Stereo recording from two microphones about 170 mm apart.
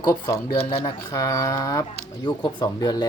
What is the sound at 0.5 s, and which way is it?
Speech, 35° left (ahead or behind).